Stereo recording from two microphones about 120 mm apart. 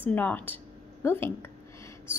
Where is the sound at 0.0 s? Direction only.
15° left (ahead or behind).